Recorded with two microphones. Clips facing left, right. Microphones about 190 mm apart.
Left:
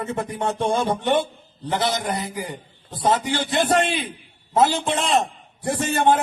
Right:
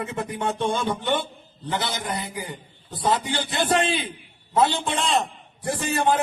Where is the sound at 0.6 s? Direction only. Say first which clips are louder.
Left 5 dB; 30° left (ahead or behind).